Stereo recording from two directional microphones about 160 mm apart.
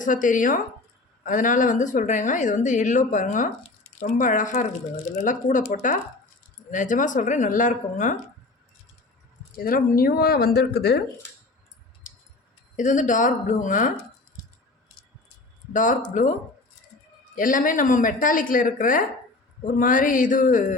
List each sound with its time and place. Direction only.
0.0 s speech: 55° left (ahead or behind)
9.6 s speech: 65° left (ahead or behind); by 11.0 s 90° left
12.1 s a sound: 55° left (ahead or behind)
12.7 s speech: 50° left (ahead or behind)
15.7 s speech: 55° left (ahead or behind)
17.3 s speech: 55° left (ahead or behind)